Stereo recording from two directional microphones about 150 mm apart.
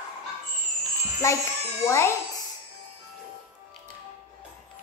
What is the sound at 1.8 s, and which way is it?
Speech, 20° left (ahead or behind).